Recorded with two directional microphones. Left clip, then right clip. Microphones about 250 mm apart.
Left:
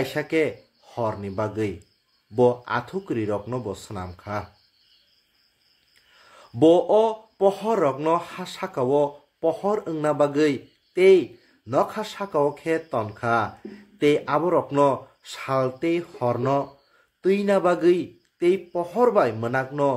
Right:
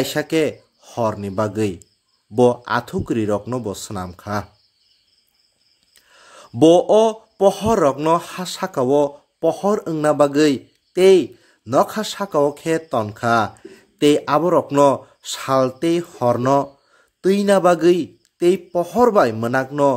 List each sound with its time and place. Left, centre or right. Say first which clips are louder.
0.1 s speech: right 4 dB; right
6.2 s speech: right 4 dB; right